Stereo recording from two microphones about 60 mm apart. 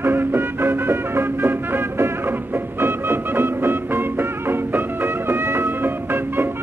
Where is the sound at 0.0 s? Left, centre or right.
Right.